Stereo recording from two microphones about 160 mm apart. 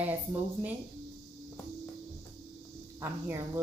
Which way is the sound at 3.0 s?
15° right (ahead or behind).